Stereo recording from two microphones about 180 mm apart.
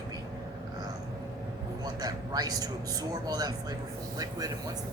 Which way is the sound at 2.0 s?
20° right (ahead or behind).